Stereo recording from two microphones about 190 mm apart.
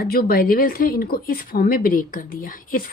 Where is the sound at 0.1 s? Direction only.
50° left (ahead or behind).